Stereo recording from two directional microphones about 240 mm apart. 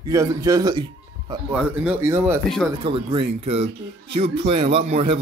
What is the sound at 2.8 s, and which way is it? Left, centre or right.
A man's voice, right.